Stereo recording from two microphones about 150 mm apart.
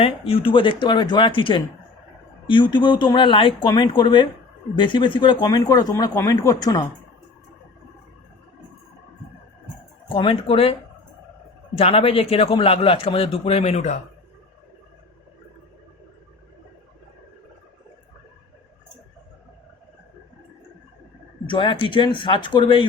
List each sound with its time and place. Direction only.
0.0 s a man's voice: 35° left (ahead or behind)
10.1 s a man's voice: 35° left (ahead or behind)
21.4 s a man's voice: 35° left (ahead or behind)